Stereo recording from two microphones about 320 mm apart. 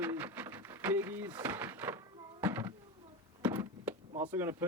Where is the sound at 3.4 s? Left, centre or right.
Centre.